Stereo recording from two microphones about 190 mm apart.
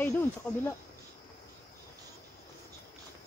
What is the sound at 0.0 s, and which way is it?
Speech, 10° left (ahead or behind).